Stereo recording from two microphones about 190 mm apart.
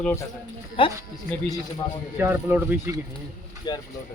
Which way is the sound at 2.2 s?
10° right (ahead or behind).